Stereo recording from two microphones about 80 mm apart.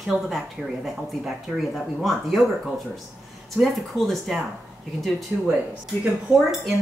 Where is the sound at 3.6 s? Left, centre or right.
Centre.